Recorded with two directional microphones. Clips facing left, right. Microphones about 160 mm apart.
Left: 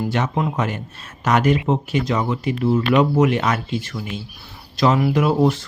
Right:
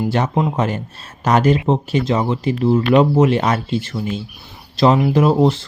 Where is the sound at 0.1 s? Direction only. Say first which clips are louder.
Right 3 dB; 35° right (ahead or behind).